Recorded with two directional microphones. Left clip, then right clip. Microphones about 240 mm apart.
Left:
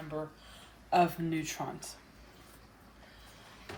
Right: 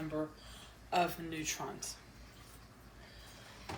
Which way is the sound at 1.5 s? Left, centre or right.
Left.